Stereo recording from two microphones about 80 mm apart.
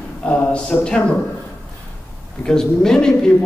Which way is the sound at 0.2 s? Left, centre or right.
Centre.